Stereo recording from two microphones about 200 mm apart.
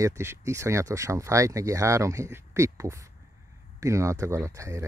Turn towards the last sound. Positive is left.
turn(degrees=-15)  # may be behind; listen again after turning